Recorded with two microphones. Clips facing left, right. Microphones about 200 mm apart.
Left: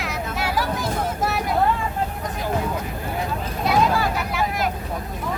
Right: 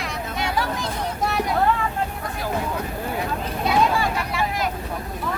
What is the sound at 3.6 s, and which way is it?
Vehicle, centre (ahead or behind).